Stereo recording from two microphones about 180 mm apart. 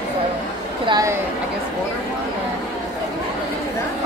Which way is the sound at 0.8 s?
20° right (ahead or behind).